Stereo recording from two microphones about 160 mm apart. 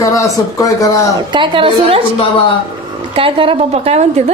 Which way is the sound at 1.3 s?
30° right (ahead or behind).